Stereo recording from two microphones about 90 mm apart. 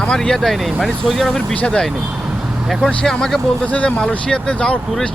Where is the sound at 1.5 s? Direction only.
15° left (ahead or behind).